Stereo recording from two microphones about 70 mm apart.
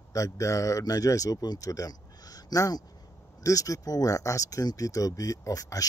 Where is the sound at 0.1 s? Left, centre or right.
Left.